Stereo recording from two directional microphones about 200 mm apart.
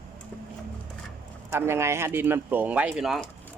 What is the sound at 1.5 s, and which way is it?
Speech, 10° right (ahead or behind).